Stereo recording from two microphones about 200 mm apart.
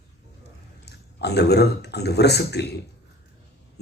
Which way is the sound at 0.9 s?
55° left (ahead or behind).